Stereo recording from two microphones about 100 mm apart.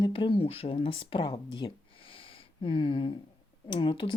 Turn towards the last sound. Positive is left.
turn(degrees=55)  # may be behind; listen again after turning